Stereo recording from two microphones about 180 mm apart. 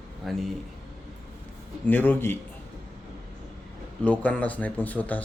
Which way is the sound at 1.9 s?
10° left (ahead or behind).